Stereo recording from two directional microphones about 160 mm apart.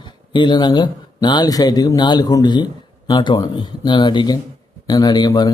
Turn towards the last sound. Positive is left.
turn(degrees=25)  # may be behind; listen again after turning